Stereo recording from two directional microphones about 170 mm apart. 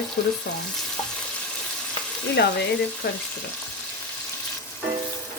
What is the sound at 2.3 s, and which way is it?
Speech, 75° left (ahead or behind).